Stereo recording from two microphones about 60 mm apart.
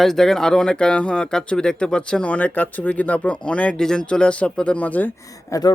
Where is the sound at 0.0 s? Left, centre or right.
Centre; by 5.1 s left.